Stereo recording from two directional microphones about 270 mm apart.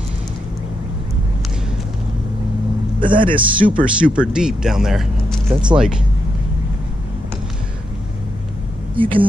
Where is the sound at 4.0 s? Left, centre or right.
Centre.